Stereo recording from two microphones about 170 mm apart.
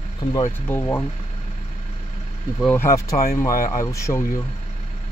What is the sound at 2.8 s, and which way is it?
Speech, 15° left (ahead or behind).